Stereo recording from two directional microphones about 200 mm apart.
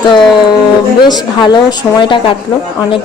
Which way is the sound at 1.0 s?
20° left (ahead or behind).